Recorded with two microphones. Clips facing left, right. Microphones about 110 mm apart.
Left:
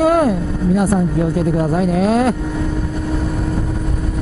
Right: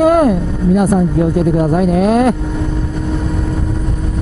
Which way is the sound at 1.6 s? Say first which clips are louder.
Right 3 dB; 15° right (ahead or behind).